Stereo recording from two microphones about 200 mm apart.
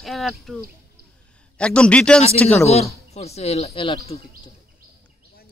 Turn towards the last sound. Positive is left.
turn(degrees=25)  # may be behind; listen again after turning